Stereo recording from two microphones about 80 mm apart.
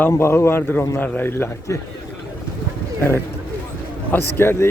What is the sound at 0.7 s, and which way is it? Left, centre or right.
Speech, left.